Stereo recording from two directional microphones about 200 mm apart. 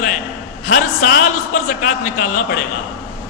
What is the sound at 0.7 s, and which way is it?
Speech, 55° left (ahead or behind).